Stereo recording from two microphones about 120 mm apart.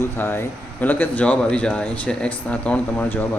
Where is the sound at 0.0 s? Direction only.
20° left (ahead or behind).